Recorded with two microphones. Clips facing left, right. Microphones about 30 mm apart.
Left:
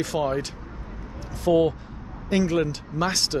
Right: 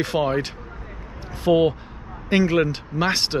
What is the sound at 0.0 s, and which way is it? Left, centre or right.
Speech, right.